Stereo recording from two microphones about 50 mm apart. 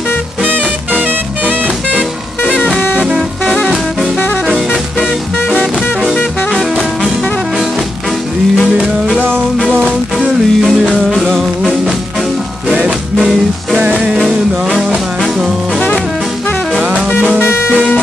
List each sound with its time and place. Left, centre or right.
0.4 s music: right
3.4 s music: centre
10.1 s music: centre
13.2 s music: centre
17.4 s music: left